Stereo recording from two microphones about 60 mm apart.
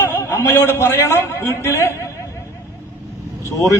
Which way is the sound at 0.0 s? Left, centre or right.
Left.